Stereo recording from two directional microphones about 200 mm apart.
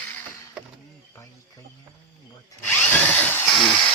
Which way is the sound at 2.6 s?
10° left (ahead or behind).